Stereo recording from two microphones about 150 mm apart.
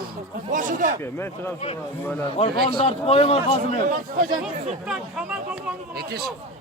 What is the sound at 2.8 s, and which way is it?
Speech, 40° left (ahead or behind).